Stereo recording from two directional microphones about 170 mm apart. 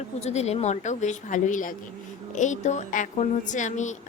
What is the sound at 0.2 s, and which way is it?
A woman's voice, 40° left (ahead or behind).